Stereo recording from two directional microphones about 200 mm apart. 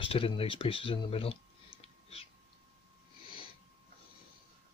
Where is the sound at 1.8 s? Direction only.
30° left (ahead or behind).